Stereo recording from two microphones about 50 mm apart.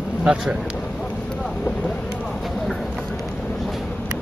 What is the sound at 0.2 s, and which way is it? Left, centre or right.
Speech, centre.